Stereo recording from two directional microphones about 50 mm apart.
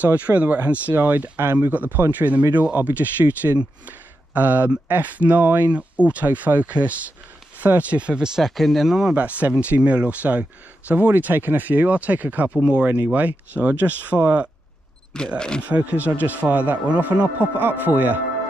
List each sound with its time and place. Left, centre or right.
0.0 s speech: right
1.7 s speech: right
5.2 s speech: right
8.0 s speech: right
8.4 s speech: centre
9.1 s speech: right
15.3 s speech: centre
15.8 s speech: right
17.6 s speech: right